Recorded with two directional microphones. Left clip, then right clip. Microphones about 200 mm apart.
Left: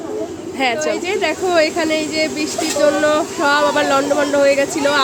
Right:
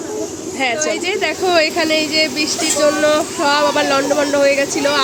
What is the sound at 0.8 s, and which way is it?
Speech, 5° right (ahead or behind).